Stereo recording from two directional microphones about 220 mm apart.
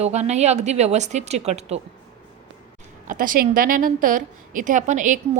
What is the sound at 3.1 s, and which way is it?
A woman's voice, 40° right (ahead or behind).